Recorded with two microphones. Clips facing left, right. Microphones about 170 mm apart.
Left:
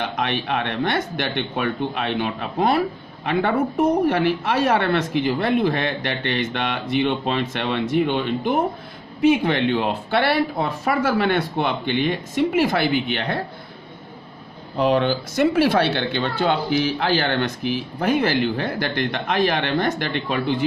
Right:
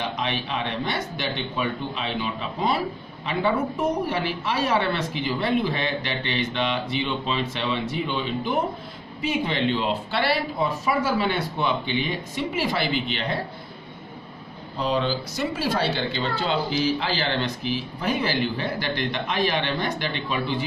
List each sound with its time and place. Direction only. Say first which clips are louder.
0.1 s speech: left 4 dB; 60° left (ahead or behind)
14.8 s speech: left 6 dB; 60° left (ahead or behind)